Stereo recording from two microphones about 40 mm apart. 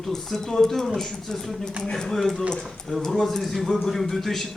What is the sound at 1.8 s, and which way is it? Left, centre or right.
Speech, left.